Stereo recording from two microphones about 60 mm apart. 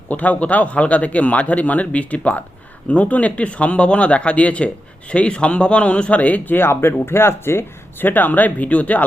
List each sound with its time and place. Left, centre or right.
0.1 s speech: left